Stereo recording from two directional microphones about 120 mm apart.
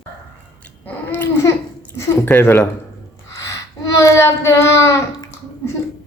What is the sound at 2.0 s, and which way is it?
Speech, 20° left (ahead or behind).